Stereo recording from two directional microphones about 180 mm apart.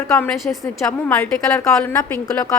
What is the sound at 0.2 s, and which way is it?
A woman's voice, 5° left (ahead or behind).